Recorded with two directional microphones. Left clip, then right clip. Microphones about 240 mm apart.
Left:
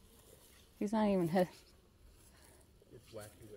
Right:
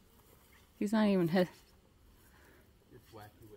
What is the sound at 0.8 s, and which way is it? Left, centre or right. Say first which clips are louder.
Speech: right 2 dB; centre.